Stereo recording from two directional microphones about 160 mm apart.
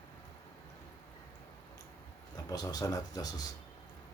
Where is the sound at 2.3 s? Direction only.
25° left (ahead or behind).